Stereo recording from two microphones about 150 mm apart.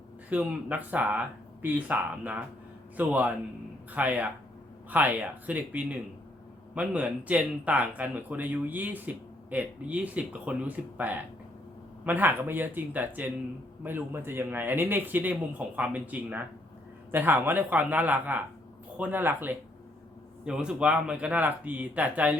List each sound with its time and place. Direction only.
0.3 s speech: 10° right (ahead or behind)